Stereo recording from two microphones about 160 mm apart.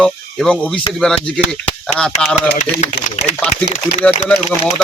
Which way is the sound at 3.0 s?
90° left.